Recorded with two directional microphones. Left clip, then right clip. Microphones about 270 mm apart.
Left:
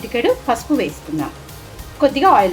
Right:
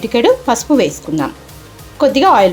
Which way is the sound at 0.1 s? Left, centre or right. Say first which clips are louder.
Right 5 dB; right.